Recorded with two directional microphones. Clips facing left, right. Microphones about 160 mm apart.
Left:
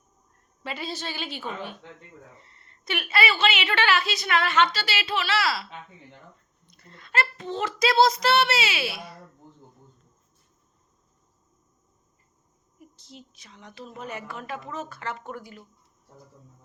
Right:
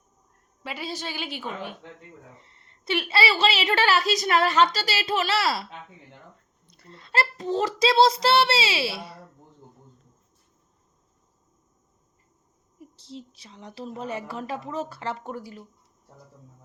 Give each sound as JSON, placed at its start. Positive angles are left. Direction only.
{"t": 0.6, "sound": "a woman's voice", "side_deg": -10}
{"t": 6.7, "sound": "a woman's voice", "side_deg": -30}
{"t": 12.8, "sound": "a woman's voice", "side_deg": -30}